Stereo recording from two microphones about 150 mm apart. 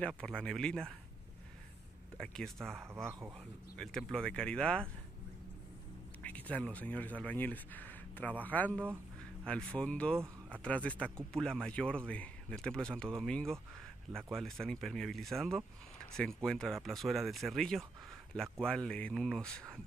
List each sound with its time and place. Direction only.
0.2 s speech: 5° left (ahead or behind)
2.1 s speech: 5° left (ahead or behind)
2.7 s speech: 15° right (ahead or behind)
3.7 s speech: 5° left (ahead or behind)
6.2 s speech: 10° left (ahead or behind)
8.7 s speech: 15° right (ahead or behind)
9.5 s speech: 5° left (ahead or behind)
10.1 s speech: 15° right (ahead or behind)
10.6 s speech: 10° left (ahead or behind)